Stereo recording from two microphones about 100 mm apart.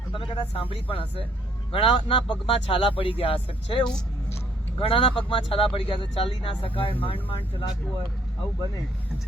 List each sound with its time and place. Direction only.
0.1 s speech: 55° left (ahead or behind)